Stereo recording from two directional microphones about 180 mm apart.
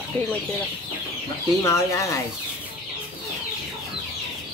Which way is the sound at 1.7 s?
15° left (ahead or behind).